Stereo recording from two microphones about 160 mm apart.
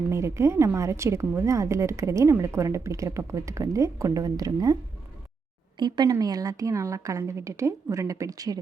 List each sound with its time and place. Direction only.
0.1 s a woman's voice: 15° right (ahead or behind)